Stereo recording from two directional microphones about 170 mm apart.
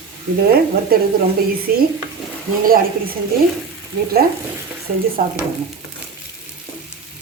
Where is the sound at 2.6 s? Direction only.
60° right (ahead or behind).